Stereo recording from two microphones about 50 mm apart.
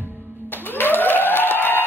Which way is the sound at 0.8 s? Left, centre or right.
Left.